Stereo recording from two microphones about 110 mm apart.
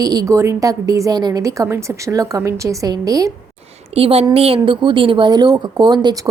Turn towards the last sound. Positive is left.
turn(degrees=-40)  # may be behind; listen again after turning